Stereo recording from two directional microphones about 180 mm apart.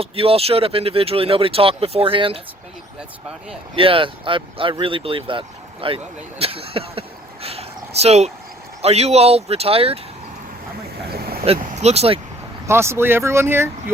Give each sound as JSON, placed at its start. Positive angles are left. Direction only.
{"t": 0.0, "sound": "speech", "side_deg": -30}
{"t": 3.8, "sound": "speech", "side_deg": -30}
{"t": 7.4, "sound": "a sound", "side_deg": -35}
{"t": 8.8, "sound": "speech", "side_deg": -35}
{"t": 11.1, "sound": "boat", "side_deg": -60}
{"t": 11.6, "sound": "speech", "side_deg": -35}
{"t": 12.6, "sound": "speech", "side_deg": -15}